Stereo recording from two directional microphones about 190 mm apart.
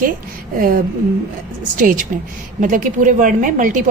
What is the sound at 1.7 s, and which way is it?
A woman's voice, 45° right (ahead or behind).